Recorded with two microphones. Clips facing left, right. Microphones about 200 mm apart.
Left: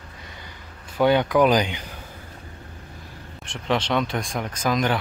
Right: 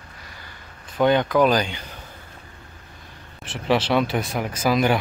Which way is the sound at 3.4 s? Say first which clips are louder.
Right 3 dB; 5° right (ahead or behind).